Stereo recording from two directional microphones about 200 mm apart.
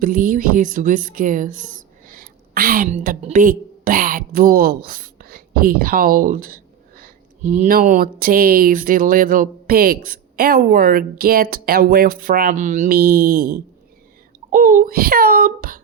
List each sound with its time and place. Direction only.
0.0 s speech: 45° right (ahead or behind)